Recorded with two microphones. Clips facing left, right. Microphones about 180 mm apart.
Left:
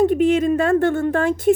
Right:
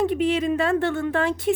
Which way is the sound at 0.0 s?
45° left (ahead or behind).